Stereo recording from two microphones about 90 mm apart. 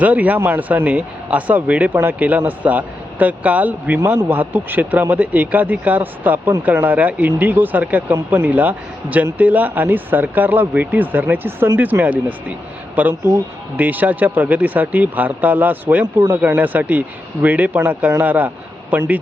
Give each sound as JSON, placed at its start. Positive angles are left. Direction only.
{"t": 0.0, "sound": "a man's voice", "side_deg": -15}